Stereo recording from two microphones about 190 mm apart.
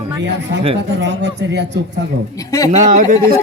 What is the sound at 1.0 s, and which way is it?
Speech, 65° right (ahead or behind).